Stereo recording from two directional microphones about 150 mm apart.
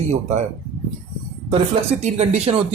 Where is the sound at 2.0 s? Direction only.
45° right (ahead or behind).